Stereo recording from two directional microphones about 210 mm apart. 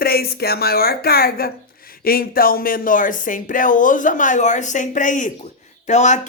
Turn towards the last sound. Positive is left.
turn(degrees=35)  # may be behind; listen again after turning